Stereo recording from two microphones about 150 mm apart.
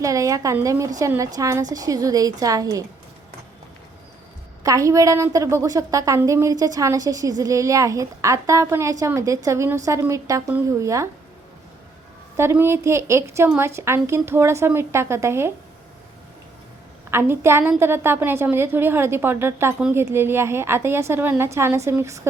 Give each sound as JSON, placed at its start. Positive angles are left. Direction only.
{"t": 0.0, "sound": "a woman's voice", "side_deg": -20}
{"t": 4.6, "sound": "a woman's voice", "side_deg": -20}
{"t": 12.4, "sound": "a woman's voice", "side_deg": -15}
{"t": 17.1, "sound": "a woman's voice", "side_deg": -15}